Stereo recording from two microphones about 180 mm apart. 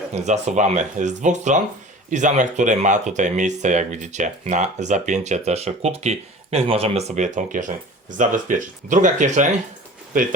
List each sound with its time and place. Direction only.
0.1 s speech: 40° right (ahead or behind)